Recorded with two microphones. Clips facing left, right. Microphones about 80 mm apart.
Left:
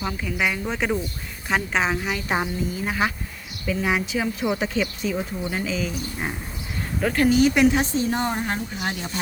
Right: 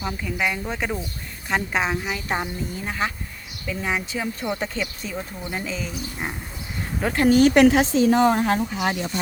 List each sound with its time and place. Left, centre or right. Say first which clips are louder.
0.0 s speech: even; centre
7.0 s speech: left 1 dB; right
7.3 s speech: right 4 dB; right
7.7 s a woman's voice: right 5 dB; right